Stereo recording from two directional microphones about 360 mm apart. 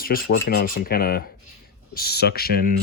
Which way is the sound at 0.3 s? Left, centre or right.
Left.